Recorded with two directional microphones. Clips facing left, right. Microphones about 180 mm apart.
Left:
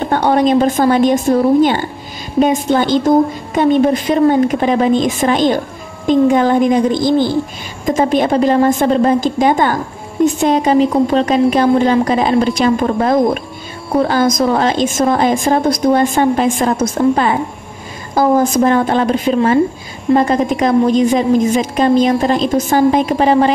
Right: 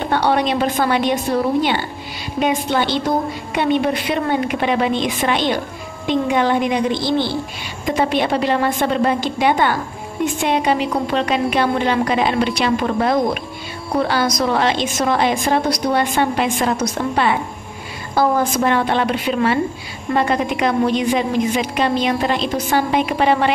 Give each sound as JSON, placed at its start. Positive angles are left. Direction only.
{"t": 0.1, "sound": "a woman's voice", "side_deg": 45}
{"t": 2.3, "sound": "a woman's voice", "side_deg": 40}